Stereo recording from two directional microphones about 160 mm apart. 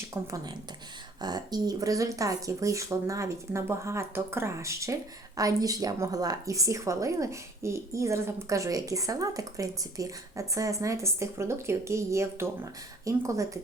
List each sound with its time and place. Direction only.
0.1 s a woman's voice: 20° right (ahead or behind)